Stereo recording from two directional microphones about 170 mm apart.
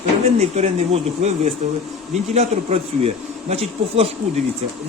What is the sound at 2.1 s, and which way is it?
A man's voice, 40° right (ahead or behind).